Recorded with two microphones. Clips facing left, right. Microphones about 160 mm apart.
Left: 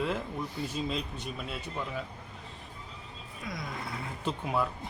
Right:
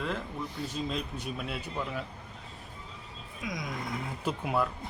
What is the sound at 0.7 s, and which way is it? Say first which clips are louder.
Speech: even; centre (ahead or behind).